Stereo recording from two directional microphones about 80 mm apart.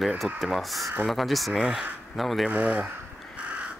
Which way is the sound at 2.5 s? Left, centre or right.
Centre.